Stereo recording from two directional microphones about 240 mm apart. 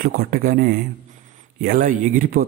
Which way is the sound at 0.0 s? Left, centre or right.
Right.